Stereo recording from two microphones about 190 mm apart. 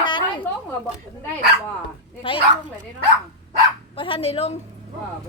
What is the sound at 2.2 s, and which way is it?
Speech, 25° left (ahead or behind).